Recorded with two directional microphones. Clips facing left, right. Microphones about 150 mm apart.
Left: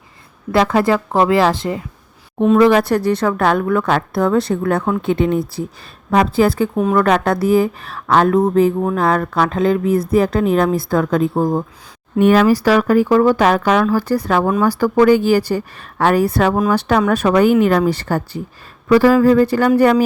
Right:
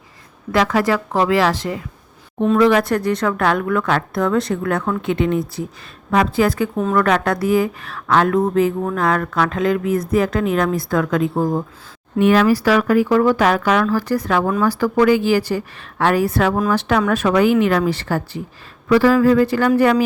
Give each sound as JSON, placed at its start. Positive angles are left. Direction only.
{"t": 0.5, "sound": "a woman's voice", "side_deg": 30}
{"t": 12.2, "sound": "speech", "side_deg": 45}
{"t": 13.8, "sound": "speech", "side_deg": 30}
{"t": 14.5, "sound": "a woman's voice", "side_deg": 20}
{"t": 14.8, "sound": "speech", "side_deg": 40}